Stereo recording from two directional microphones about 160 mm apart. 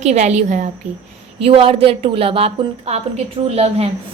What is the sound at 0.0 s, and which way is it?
Speech, 45° right (ahead or behind).